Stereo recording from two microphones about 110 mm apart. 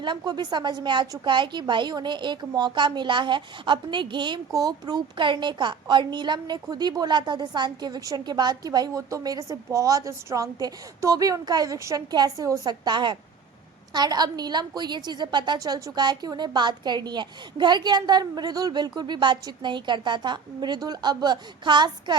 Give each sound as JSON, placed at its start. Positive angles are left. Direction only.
{"t": 0.0, "sound": "a woman's voice", "side_deg": -45}